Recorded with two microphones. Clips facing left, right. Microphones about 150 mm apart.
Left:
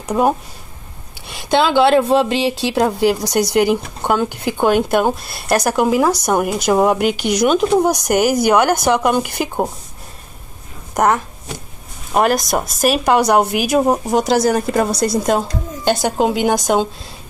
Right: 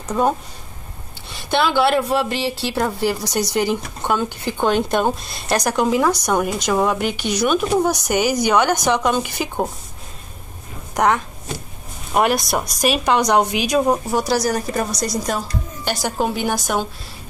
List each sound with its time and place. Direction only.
1.2 s speech: 15° left (ahead or behind)
11.0 s speech: 5° left (ahead or behind)
14.0 s a woman's voice: 20° left (ahead or behind)